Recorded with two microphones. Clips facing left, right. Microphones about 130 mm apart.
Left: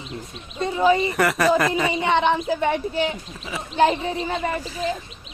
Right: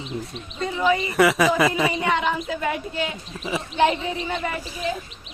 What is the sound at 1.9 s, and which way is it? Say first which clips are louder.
Speech: left 3 dB; 25° left (ahead or behind).